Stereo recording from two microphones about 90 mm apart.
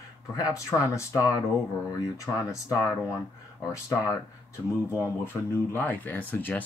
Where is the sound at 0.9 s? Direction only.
35° left (ahead or behind).